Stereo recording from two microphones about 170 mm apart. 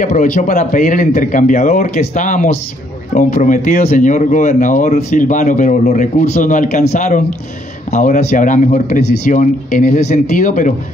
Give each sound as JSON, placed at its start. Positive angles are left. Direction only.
{"t": 0.0, "sound": "speech", "side_deg": 45}